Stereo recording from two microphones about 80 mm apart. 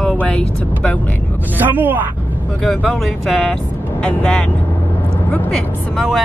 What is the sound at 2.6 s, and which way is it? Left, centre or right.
Speech, centre.